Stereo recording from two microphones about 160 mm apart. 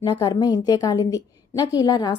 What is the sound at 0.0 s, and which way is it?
A woman's voice, 25° left (ahead or behind).